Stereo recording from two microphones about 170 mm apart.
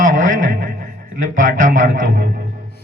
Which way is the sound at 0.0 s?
50° right (ahead or behind).